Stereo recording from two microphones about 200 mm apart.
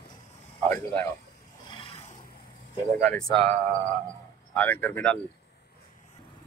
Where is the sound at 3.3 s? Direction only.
30° right (ahead or behind).